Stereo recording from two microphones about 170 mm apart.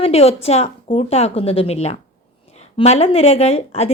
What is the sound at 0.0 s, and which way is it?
Speech, 35° left (ahead or behind).